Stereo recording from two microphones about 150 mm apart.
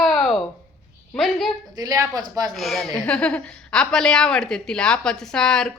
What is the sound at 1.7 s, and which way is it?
Speech, 25° right (ahead or behind).